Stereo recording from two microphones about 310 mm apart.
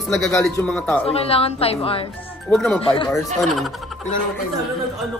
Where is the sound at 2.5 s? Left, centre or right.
Centre.